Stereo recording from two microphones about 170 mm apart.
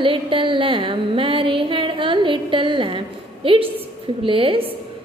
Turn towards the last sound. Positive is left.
turn(degrees=-30)  # may be behind; listen again after turning